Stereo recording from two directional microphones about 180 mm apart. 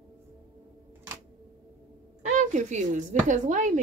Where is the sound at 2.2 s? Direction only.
40° right (ahead or behind).